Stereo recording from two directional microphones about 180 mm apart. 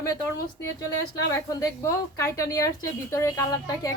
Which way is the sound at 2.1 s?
15° left (ahead or behind).